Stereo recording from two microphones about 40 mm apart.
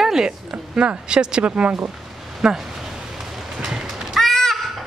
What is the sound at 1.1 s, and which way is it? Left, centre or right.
Speech, right.